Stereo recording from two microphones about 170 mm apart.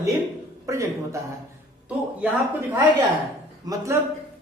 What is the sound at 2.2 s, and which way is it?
Speech, 15° right (ahead or behind).